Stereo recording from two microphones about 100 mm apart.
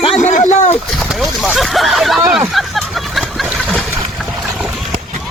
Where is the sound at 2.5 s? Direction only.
Centre (ahead or behind).